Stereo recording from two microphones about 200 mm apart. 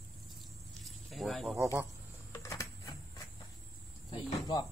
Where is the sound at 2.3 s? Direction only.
15° left (ahead or behind).